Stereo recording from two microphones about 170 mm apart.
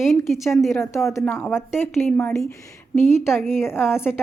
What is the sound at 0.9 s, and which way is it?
A woman's voice, 15° left (ahead or behind).